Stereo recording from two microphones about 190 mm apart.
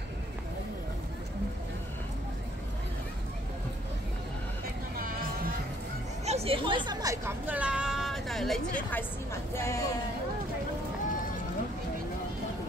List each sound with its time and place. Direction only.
4.9 s music: 50° right (ahead or behind)
6.2 s a woman's voice: 30° right (ahead or behind); by 9.8 s 15° left (ahead or behind)